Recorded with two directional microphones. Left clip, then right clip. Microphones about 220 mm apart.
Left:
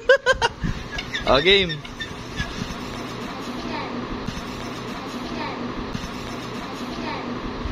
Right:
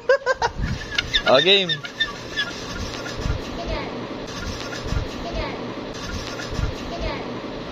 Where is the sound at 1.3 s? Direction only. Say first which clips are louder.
Right 1 dB; 15° left (ahead or behind).